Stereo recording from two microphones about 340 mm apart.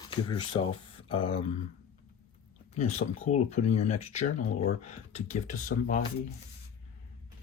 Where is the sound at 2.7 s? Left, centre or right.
Centre.